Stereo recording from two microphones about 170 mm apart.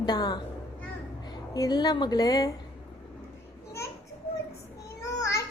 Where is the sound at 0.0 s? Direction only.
25° left (ahead or behind).